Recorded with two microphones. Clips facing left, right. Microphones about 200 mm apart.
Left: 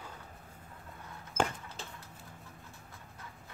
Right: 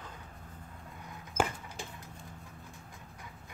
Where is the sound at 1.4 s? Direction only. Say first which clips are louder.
Right 1 dB; 10° right (ahead or behind).